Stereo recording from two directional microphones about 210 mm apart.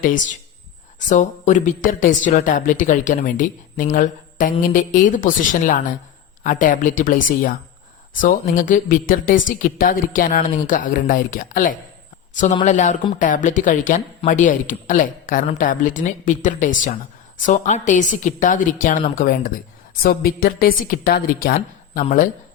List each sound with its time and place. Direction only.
0.0 s speech: 40° left (ahead or behind)
3.9 s mantra: 40° left (ahead or behind)
4.7 s speech: 40° left (ahead or behind)